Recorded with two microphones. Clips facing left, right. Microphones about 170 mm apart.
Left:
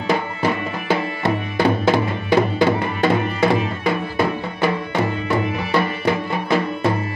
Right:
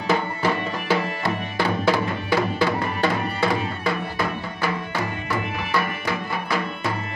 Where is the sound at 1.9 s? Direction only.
20° left (ahead or behind).